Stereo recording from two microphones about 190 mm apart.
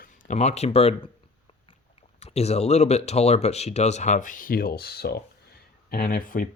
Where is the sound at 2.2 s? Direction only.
35° left (ahead or behind).